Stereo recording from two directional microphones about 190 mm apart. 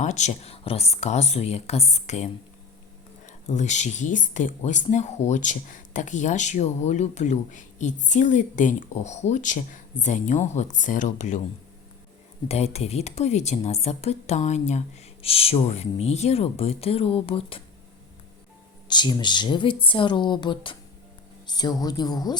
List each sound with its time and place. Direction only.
0.0 s speech: 40° left (ahead or behind)
12.5 s speech: 35° left (ahead or behind)
18.9 s speech: 25° left (ahead or behind)